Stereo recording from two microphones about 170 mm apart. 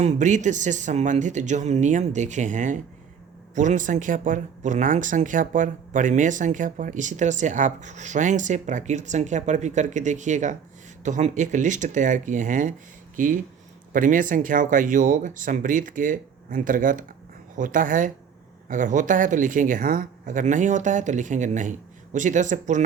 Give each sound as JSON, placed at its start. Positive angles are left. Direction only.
{"t": 0.0, "sound": "speech", "side_deg": -45}